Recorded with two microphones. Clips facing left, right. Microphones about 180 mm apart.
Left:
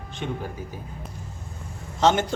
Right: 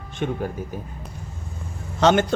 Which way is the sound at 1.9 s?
65° right (ahead or behind).